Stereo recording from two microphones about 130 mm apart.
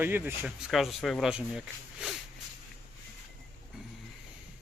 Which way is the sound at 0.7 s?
Centre (ahead or behind).